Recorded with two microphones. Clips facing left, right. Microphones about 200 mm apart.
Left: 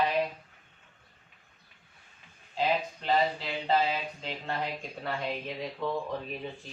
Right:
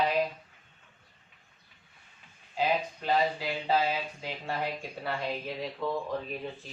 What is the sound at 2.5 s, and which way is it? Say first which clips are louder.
Speech: even; 10° right (ahead or behind).